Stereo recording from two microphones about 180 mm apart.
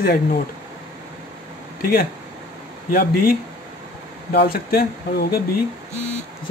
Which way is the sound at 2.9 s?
55° left (ahead or behind).